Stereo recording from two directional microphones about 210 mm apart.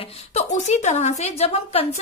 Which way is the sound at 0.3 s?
35° left (ahead or behind).